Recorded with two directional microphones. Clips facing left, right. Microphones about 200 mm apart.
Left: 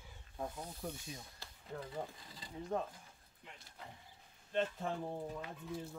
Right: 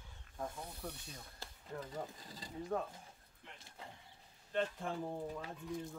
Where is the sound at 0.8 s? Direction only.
10° left (ahead or behind).